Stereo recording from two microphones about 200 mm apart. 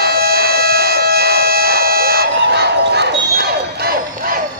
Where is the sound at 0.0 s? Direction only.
50° right (ahead or behind).